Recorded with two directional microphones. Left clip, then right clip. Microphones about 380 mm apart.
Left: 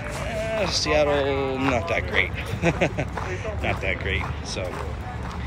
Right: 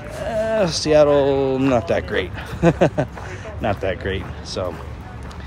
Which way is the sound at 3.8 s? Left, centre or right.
Right.